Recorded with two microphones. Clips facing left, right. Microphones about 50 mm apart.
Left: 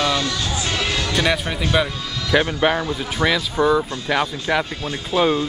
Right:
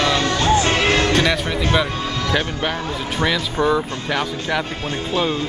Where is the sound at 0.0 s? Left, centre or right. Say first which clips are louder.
Right 3 dB; right.